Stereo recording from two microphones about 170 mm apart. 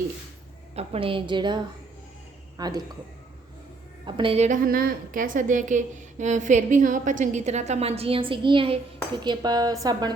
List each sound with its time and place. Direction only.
0.8 s a woman's voice: 30° right (ahead or behind)
4.0 s a woman's voice: 30° right (ahead or behind)
4.4 s a woman's voice: 50° right (ahead or behind); by 10.2 s 25° right (ahead or behind)